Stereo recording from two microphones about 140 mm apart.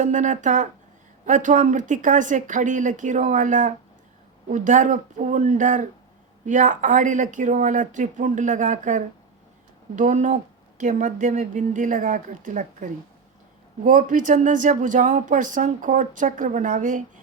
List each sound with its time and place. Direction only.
0.0 s speech: 65° right (ahead or behind)